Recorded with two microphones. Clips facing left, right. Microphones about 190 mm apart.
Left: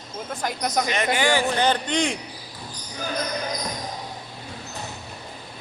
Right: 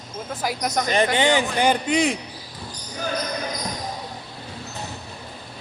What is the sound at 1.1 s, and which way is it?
A man's voice, 20° right (ahead or behind).